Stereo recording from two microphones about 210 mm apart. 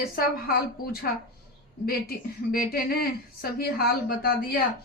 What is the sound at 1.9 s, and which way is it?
A woman's voice, 45° left (ahead or behind).